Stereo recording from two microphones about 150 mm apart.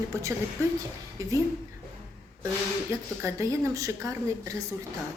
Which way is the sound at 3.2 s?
20° right (ahead or behind).